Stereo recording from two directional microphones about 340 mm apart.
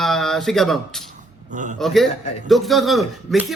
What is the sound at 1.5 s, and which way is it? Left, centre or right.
Speech, right.